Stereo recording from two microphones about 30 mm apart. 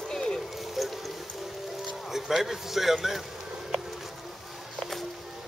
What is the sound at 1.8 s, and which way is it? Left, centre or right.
Speech, centre.